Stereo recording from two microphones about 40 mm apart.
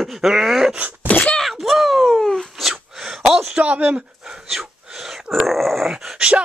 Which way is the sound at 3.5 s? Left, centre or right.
Right.